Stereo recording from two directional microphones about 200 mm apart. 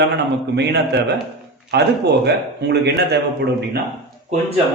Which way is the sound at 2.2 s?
55° right (ahead or behind).